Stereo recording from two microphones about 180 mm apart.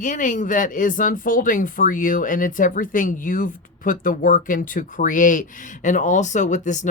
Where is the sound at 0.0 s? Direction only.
45° left (ahead or behind).